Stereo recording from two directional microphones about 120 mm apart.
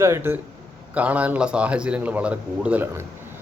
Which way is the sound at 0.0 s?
20° right (ahead or behind).